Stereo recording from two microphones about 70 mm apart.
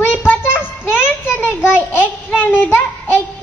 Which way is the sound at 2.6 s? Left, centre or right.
Left.